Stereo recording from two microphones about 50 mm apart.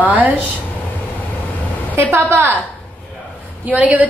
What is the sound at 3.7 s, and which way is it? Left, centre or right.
Speech, right.